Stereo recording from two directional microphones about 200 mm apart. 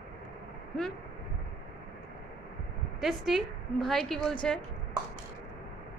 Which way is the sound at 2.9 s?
Centre (ahead or behind).